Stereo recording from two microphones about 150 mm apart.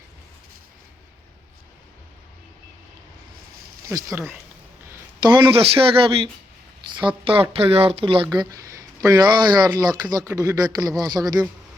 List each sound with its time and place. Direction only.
3.8 s speech: 15° right (ahead or behind)
5.2 s speech: 25° right (ahead or behind)
5.5 s speech: 40° right (ahead or behind)
7.5 s speech: 40° right (ahead or behind)